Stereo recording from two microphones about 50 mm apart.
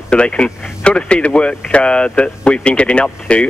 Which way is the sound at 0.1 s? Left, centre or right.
Left.